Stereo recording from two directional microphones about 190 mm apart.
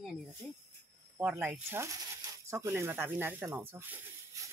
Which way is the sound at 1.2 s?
10° right (ahead or behind).